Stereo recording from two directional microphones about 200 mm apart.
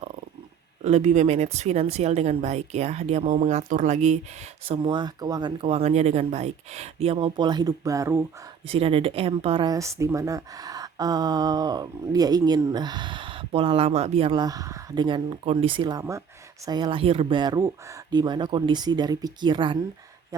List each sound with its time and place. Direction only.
0.9 s speech: 35° right (ahead or behind); by 8.2 s 15° right (ahead or behind)
8.6 s a woman's voice: 30° right (ahead or behind)
14.4 s a woman's voice: 15° right (ahead or behind)